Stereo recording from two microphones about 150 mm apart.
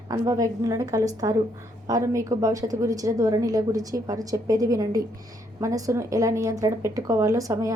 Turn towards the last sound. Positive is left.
turn(degrees=-20)  # may be behind; listen again after turning